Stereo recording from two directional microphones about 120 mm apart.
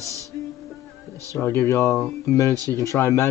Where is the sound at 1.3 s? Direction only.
20° left (ahead or behind).